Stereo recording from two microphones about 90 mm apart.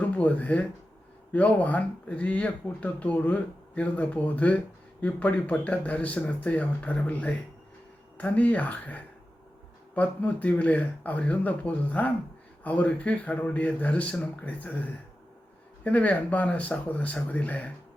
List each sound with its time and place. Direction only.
0.0 s speech: 15° left (ahead or behind)